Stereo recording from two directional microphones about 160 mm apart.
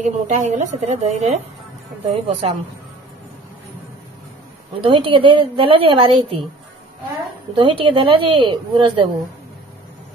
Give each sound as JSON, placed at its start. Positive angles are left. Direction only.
{"t": 0.0, "sound": "a woman's voice", "side_deg": -45}
{"t": 4.8, "sound": "a woman's voice", "side_deg": -30}
{"t": 7.5, "sound": "a woman's voice", "side_deg": -30}